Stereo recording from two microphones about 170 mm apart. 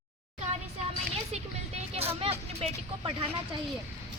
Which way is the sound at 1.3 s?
40° right (ahead or behind).